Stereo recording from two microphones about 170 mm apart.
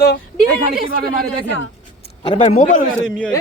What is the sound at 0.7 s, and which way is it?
Speech, 60° right (ahead or behind).